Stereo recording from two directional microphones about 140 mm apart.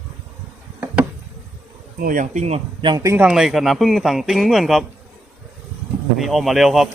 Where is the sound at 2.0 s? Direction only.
75° right (ahead or behind); by 2.6 s 55° right (ahead or behind).